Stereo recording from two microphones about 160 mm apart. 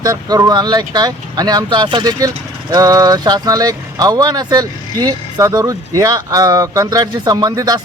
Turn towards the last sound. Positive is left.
turn(degrees=-20)  # may be behind; listen again after turning